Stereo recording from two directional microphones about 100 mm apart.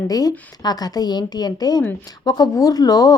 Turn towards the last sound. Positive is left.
turn(degrees=40)  # may be behind; listen again after turning